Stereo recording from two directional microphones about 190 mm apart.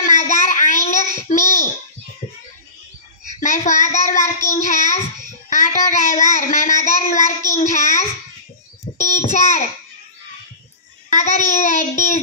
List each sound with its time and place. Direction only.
0.0 s child singing: 40° left (ahead or behind)
3.3 s child singing: 40° left (ahead or behind)
5.5 s a child's voice: 40° left (ahead or behind)
11.1 s a child's voice: 40° left (ahead or behind)